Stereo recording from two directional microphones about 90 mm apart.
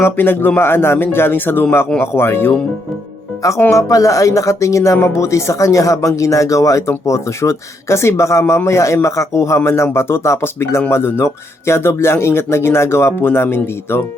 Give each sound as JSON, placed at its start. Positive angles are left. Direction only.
{"t": 0.0, "sound": "speech", "side_deg": 25}
{"t": 3.7, "sound": "speech", "side_deg": 35}